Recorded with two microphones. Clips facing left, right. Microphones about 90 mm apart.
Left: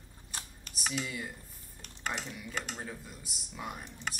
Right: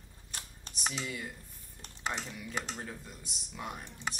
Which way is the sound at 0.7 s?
Centre (ahead or behind).